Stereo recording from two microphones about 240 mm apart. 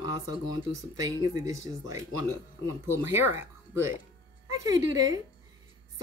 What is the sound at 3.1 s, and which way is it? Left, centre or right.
Speech, centre.